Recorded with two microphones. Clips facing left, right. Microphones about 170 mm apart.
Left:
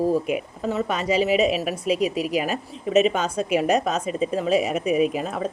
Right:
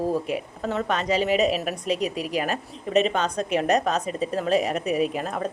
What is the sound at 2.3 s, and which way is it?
A woman's voice, 10° left (ahead or behind).